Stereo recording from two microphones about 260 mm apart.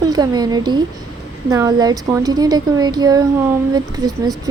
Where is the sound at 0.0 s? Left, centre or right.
Centre.